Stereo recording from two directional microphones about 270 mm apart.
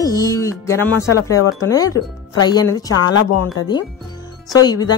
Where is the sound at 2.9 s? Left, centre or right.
Left.